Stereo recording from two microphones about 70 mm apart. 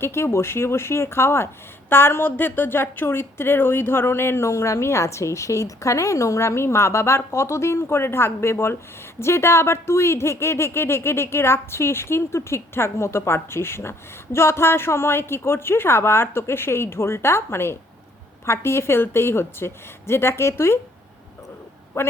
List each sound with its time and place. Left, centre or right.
0.0 s a woman's voice: left
22.0 s speech: left